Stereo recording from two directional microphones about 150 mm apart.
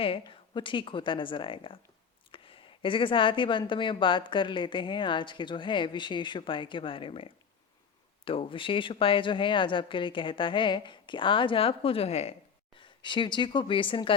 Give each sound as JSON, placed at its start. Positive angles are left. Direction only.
{"t": 0.0, "sound": "speech", "side_deg": 35}
{"t": 12.8, "sound": "speech", "side_deg": 30}